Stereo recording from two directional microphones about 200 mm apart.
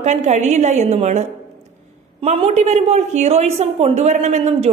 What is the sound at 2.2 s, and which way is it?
A woman's voice, 30° right (ahead or behind).